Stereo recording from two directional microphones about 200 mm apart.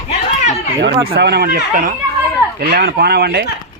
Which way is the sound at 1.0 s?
55° right (ahead or behind).